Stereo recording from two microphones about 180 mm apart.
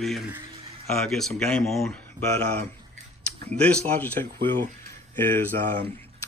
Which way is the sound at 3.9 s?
10° left (ahead or behind).